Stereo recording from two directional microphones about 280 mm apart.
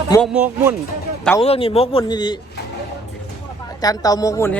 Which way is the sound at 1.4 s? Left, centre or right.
Left.